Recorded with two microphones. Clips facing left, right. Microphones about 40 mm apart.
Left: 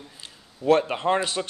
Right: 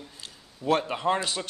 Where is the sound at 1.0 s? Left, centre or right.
Centre.